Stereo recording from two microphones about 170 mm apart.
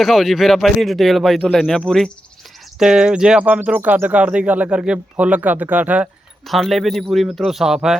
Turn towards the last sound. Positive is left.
turn(degrees=-5)  # may be behind; listen again after turning